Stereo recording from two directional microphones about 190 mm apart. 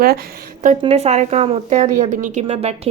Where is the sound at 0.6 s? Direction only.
35° right (ahead or behind).